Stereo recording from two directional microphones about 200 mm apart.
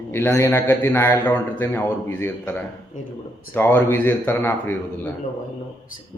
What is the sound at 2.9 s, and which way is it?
Speech, 40° left (ahead or behind).